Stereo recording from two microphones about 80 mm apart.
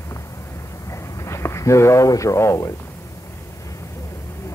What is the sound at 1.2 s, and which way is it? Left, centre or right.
Speech, left.